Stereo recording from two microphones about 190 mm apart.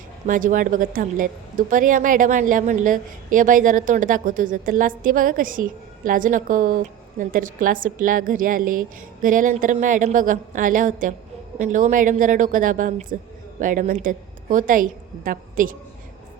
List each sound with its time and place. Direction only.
0.3 s a woman's voice: 45° right (ahead or behind)